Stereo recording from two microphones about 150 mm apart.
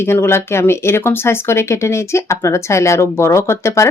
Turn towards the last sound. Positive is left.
turn(degrees=20)  # may be behind; listen again after turning